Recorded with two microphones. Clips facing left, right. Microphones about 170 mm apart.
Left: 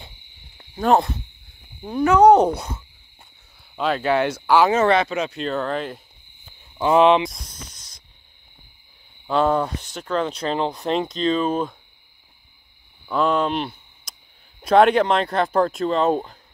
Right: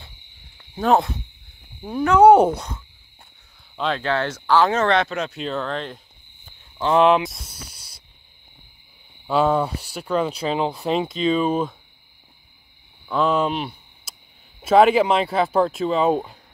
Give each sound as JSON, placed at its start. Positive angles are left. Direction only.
{"t": 0.7, "sound": "speech", "side_deg": 0}
{"t": 2.5, "sound": "speech", "side_deg": 5}
{"t": 6.8, "sound": "a sound", "side_deg": 5}
{"t": 9.3, "sound": "speech", "side_deg": -5}
{"t": 13.1, "sound": "speech", "side_deg": 0}